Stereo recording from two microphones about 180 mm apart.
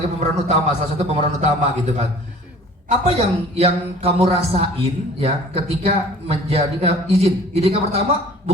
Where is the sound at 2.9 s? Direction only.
35° right (ahead or behind).